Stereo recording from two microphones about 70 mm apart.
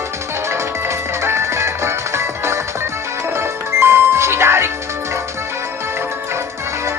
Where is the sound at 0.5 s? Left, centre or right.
Right.